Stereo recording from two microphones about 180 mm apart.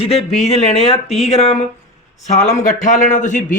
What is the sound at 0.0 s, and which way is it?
Speech, 35° left (ahead or behind).